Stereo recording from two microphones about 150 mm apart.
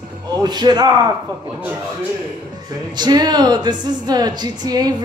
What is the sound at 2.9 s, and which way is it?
Speech, 30° right (ahead or behind).